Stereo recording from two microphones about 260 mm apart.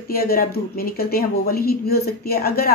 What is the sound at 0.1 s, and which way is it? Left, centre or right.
A woman's voice, left.